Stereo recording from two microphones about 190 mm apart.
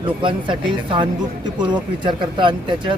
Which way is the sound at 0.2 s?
25° right (ahead or behind).